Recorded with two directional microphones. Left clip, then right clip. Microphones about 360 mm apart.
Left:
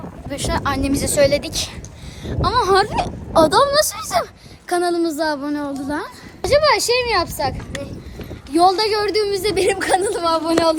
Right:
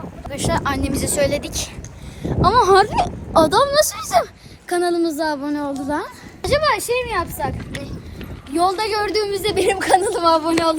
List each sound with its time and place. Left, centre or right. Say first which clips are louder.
0.3 s a child's voice: even; centre
8.5 s a woman's voice: left 3 dB; centre